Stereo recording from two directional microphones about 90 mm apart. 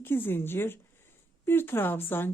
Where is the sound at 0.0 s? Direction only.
25° left (ahead or behind).